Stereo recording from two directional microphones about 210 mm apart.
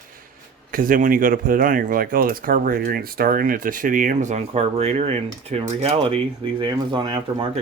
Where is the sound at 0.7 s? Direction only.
40° right (ahead or behind); by 7.4 s 20° right (ahead or behind).